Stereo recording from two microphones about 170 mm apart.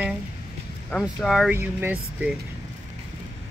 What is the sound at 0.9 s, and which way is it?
Speech, 10° left (ahead or behind).